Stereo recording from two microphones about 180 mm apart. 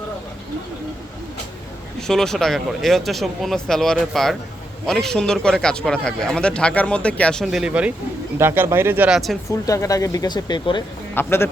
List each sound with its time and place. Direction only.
2.0 s speech: 5° left (ahead or behind)
9.5 s speech: 15° left (ahead or behind)
11.1 s a man's voice: 10° left (ahead or behind)